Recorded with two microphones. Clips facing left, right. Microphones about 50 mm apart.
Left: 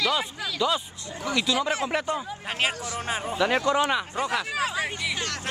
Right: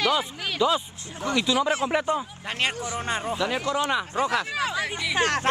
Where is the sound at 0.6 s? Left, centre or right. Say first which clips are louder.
Right 3 dB; centre.